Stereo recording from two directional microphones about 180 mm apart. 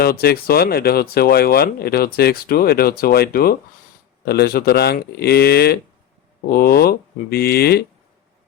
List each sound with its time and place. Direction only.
0.0 s speech: 60° left (ahead or behind)